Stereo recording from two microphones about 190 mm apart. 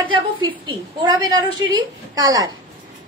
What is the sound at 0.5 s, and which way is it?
A woman's voice, 25° right (ahead or behind).